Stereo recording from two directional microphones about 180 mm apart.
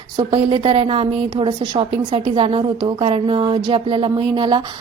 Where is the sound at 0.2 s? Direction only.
30° right (ahead or behind).